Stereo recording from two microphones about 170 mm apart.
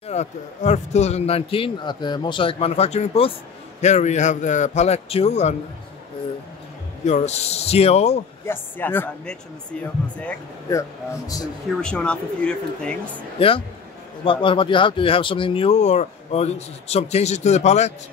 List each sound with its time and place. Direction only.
0.1 s a man's voice: 40° left (ahead or behind)
7.1 s speech: 40° left (ahead or behind)
8.5 s speech: 10° left (ahead or behind)
10.7 s speech: 20° left (ahead or behind)
11.8 s speech: 5° left (ahead or behind)
13.4 s speech: 30° left (ahead or behind)